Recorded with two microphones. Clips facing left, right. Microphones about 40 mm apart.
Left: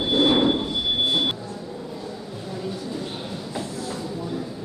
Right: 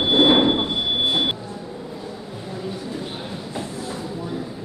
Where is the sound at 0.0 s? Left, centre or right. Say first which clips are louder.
Right 4 dB; right.